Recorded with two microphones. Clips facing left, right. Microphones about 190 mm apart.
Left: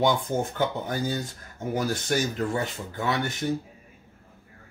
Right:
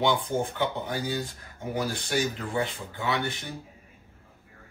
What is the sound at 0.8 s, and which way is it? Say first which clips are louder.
Speech: left 2 dB; 45° left (ahead or behind).